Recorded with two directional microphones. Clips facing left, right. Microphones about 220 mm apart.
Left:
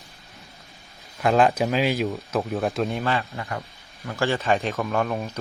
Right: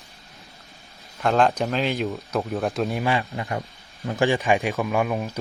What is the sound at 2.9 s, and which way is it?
Speech, 15° right (ahead or behind).